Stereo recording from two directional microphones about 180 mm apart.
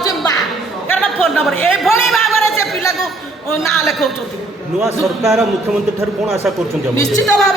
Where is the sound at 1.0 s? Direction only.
Centre (ahead or behind).